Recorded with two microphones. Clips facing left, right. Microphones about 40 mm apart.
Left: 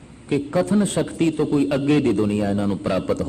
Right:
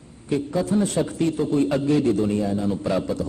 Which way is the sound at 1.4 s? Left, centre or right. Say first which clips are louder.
Even; centre.